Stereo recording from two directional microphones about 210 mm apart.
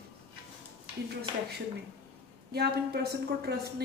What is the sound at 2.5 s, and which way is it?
A woman's voice, 50° right (ahead or behind).